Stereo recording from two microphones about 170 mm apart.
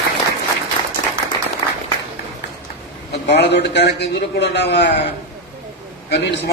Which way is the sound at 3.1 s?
80° left.